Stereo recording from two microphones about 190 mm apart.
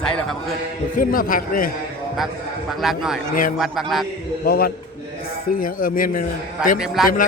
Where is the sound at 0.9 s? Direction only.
50° left (ahead or behind).